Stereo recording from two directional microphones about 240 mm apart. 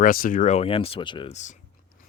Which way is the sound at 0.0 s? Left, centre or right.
Left.